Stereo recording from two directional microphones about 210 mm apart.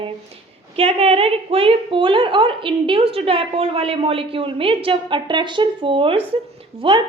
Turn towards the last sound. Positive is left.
turn(degrees=-25)  # may be behind; listen again after turning